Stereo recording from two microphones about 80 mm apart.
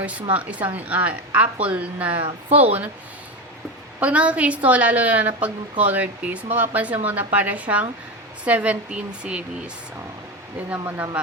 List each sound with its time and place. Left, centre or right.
0.0 s a woman's voice: centre
4.0 s a woman's voice: centre
10.8 s a woman's voice: right